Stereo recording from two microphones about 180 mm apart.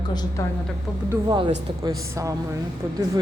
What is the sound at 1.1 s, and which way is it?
A woman's voice, 25° right (ahead or behind).